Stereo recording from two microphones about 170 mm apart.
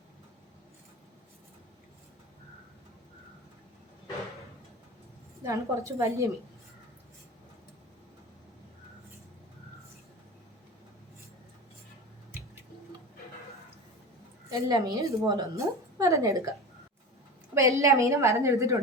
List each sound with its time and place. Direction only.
5.5 s a woman's voice: 20° right (ahead or behind)
14.5 s a woman's voice: 20° right (ahead or behind)
17.5 s a woman's voice: 15° right (ahead or behind)